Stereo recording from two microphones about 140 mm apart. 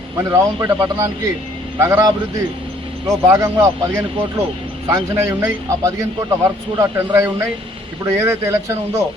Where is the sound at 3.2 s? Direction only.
20° right (ahead or behind).